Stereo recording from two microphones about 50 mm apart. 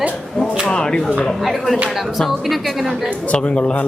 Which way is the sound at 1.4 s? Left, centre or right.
Centre.